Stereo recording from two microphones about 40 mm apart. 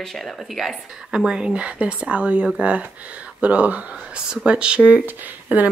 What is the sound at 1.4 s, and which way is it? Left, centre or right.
Speech, right.